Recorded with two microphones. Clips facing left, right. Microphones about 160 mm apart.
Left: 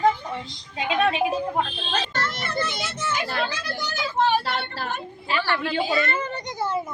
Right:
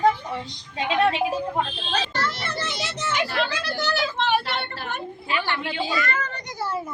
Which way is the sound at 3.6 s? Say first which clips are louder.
Right 4 dB; 65° right (ahead or behind).